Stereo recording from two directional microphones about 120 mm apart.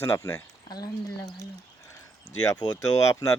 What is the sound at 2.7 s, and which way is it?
Speech, 25° left (ahead or behind).